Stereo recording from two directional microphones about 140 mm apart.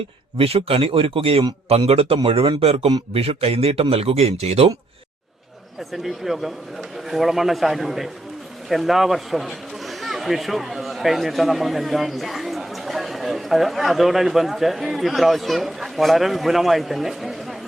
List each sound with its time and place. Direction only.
0.3 s speech: 45° right (ahead or behind)
5.9 s a man's voice: centre (ahead or behind)